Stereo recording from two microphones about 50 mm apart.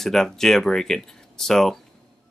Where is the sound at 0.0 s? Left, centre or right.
Centre.